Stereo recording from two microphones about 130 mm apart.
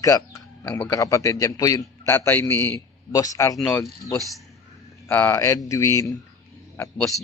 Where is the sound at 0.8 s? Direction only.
25° left (ahead or behind).